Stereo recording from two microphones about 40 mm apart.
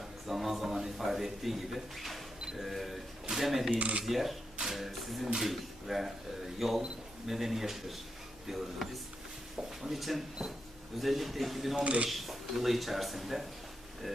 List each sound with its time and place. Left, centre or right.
0.3 s a sound: centre
3.2 s speech: centre
3.8 s speech: right
4.0 s speech: centre
4.7 s a sound: centre
5.4 s speech: centre
11.8 s speech: right
12.0 s speech: centre